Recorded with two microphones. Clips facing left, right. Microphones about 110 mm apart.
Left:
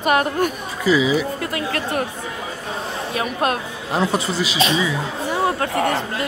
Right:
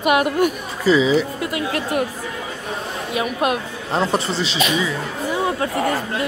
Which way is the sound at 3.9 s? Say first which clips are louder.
Even; 5° left (ahead or behind).